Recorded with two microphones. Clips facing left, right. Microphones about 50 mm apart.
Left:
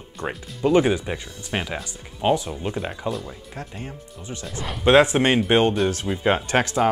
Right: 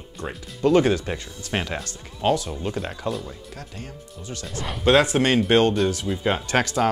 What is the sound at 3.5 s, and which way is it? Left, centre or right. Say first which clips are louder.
Speech: left 3 dB; left.